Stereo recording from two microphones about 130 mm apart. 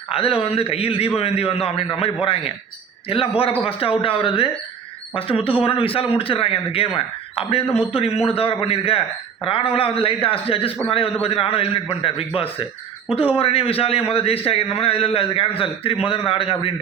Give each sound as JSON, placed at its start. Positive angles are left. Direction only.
{"t": 0.1, "sound": "a man's voice", "side_deg": 50}